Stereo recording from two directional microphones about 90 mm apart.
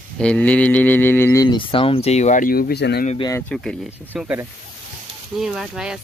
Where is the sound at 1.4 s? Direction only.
65° left (ahead or behind); by 2.0 s 85° left.